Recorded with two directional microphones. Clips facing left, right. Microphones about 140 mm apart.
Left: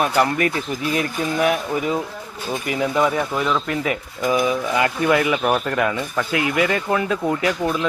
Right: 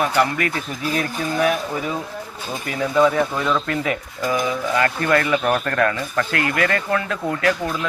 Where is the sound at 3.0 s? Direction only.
10° left (ahead or behind).